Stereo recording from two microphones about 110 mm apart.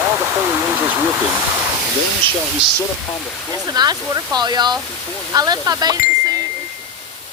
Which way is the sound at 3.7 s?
40° right (ahead or behind).